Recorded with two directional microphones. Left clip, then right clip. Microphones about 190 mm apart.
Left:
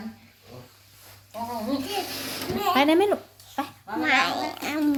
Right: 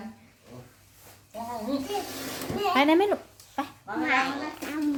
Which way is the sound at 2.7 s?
Centre (ahead or behind).